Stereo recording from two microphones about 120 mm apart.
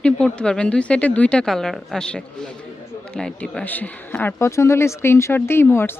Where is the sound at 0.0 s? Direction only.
10° left (ahead or behind).